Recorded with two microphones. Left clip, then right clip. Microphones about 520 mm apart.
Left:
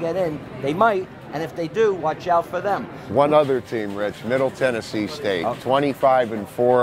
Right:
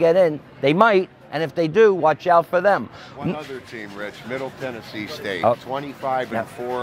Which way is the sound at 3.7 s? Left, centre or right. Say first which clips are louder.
Left 7 dB; left.